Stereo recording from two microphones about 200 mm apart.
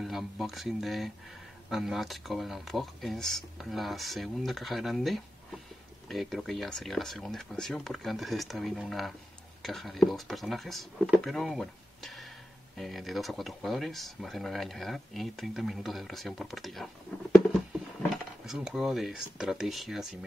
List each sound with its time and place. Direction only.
0.0 s speech: centre (ahead or behind)
18.1 s speech: centre (ahead or behind)